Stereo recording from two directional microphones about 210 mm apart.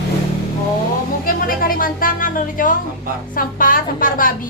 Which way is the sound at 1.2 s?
40° left (ahead or behind).